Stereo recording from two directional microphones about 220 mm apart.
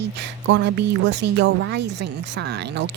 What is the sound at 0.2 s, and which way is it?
A woman's voice, 55° right (ahead or behind).